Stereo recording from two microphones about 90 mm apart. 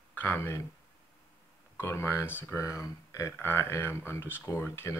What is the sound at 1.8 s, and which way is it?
Speech, 30° left (ahead or behind).